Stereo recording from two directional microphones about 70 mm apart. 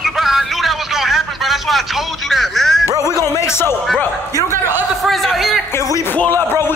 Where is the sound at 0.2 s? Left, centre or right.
Centre.